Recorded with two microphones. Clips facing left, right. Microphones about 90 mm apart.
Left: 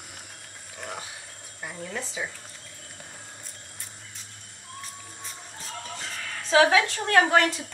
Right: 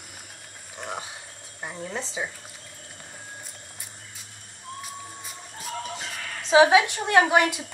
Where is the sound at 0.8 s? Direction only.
20° right (ahead or behind).